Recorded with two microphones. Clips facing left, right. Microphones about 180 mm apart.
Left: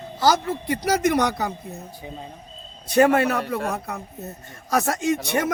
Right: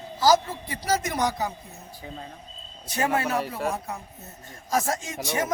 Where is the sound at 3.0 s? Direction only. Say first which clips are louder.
Left 8 dB; 65° left (ahead or behind).